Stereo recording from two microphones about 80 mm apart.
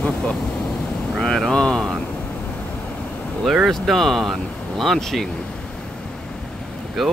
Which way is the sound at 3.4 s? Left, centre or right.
Centre.